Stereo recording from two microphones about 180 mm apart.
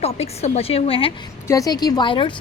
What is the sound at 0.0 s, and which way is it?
A woman's voice, 35° left (ahead or behind).